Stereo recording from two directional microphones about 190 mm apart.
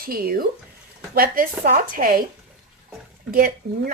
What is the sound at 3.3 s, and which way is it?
Speech, 50° right (ahead or behind).